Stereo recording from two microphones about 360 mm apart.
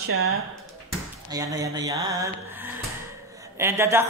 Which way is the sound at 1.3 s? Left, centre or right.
Centre.